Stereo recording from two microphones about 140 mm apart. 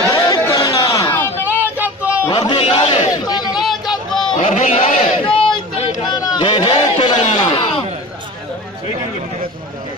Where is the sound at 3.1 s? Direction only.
30° left (ahead or behind).